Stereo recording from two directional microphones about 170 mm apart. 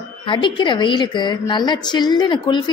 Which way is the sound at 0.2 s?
25° left (ahead or behind).